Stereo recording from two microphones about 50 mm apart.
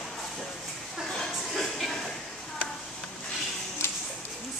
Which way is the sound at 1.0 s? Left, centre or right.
Centre.